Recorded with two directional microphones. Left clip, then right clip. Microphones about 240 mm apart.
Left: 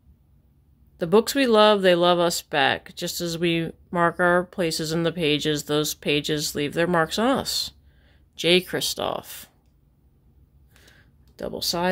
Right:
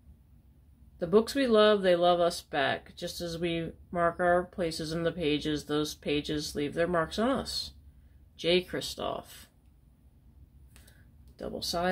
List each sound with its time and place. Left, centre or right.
0.9 s speech: left
11.3 s speech: left